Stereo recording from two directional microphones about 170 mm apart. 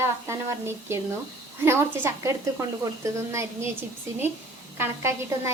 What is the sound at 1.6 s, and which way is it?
A woman's voice, 15° right (ahead or behind).